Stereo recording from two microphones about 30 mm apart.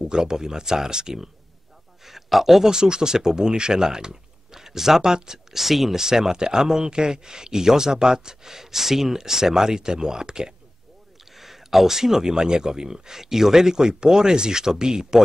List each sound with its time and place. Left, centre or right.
0.0 s speech: right
2.0 s a man's voice: centre
2.7 s speech: right
5.5 s speech: centre; by 10.5 s right
11.3 s speech: centre